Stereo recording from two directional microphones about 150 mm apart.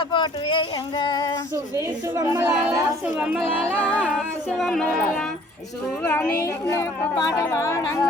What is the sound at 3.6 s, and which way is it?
Speech, 10° left (ahead or behind).